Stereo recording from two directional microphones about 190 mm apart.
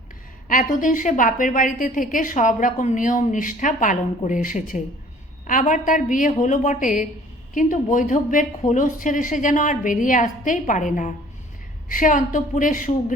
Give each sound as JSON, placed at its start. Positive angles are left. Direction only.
{"t": 0.4, "sound": "a woman's voice", "side_deg": 45}